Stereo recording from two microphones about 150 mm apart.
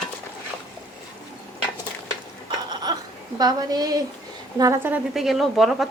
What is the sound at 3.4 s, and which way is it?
A woman's voice, 25° right (ahead or behind).